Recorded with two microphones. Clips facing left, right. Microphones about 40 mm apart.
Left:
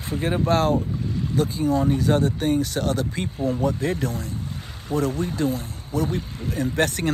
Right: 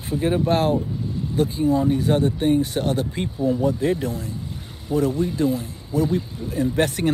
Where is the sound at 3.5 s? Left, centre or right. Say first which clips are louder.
Right 3 dB; left.